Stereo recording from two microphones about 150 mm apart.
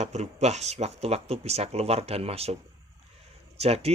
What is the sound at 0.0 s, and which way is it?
Speech, 50° right (ahead or behind).